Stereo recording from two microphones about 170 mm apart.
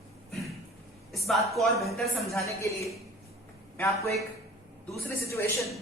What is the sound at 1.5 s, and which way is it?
Speech, centre (ahead or behind).